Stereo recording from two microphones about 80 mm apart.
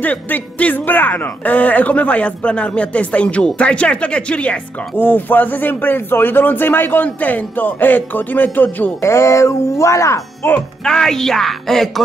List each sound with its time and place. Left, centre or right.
0.0 s speech: centre
9.0 s speech: left
10.4 s speech: left
10.8 s a woman's voice: centre